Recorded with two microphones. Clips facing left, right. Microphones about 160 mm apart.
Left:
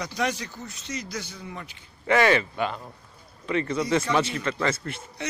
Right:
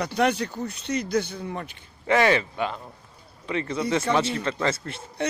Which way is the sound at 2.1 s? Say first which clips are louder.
Even; 25° right (ahead or behind).